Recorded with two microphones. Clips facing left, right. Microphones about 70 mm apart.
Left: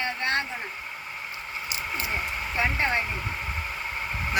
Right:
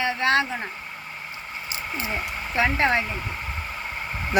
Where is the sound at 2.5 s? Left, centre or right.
Right.